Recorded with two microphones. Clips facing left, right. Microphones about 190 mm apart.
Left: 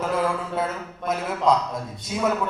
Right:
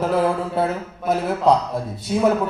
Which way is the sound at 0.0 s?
35° right (ahead or behind).